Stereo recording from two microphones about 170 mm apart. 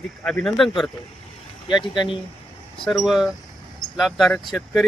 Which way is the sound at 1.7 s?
25° left (ahead or behind).